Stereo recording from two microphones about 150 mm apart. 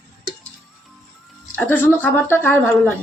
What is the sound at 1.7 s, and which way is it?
A woman's voice, 15° left (ahead or behind).